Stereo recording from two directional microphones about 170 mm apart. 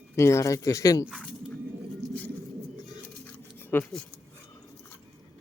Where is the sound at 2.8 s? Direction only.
20° left (ahead or behind).